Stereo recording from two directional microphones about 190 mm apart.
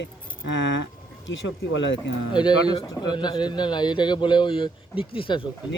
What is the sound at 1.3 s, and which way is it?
Speech, 85° left.